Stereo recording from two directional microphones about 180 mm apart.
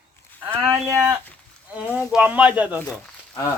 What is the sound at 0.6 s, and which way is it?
Speech, 15° right (ahead or behind).